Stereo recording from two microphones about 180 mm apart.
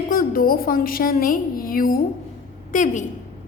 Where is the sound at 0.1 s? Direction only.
55° left (ahead or behind).